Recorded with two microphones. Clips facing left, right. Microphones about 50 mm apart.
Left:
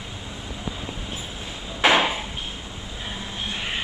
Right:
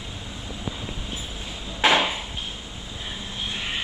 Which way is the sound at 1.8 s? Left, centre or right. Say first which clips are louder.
Left 1 dB; centre.